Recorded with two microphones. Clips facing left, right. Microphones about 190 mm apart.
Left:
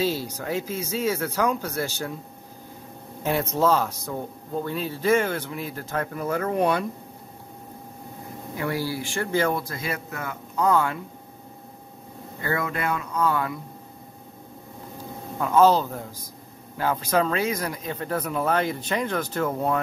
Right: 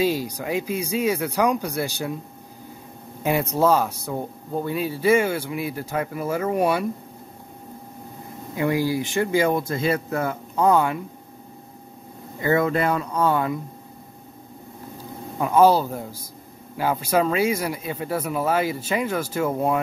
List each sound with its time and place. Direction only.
0.0 s speech: 15° right (ahead or behind)
3.3 s speech: 10° right (ahead or behind)
8.5 s a man's voice: 15° right (ahead or behind)
12.4 s a man's voice: 25° right (ahead or behind)
15.3 s speech: 15° right (ahead or behind)